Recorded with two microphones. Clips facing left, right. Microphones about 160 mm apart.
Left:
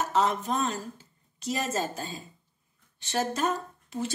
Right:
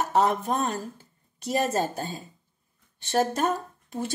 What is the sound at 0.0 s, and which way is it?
A woman's voice, 55° right (ahead or behind).